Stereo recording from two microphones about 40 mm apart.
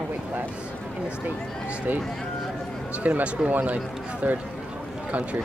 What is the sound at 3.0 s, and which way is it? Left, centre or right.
Speech, right.